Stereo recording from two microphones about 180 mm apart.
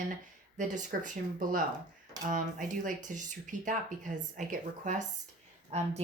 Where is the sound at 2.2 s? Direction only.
45° right (ahead or behind).